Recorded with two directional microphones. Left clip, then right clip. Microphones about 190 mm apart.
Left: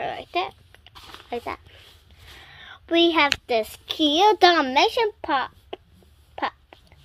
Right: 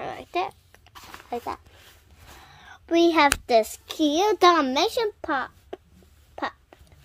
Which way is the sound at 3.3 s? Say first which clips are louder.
Right 3 dB; 25° right (ahead or behind).